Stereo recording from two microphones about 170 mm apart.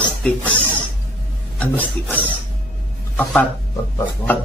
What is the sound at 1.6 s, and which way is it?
Speech, 10° left (ahead or behind).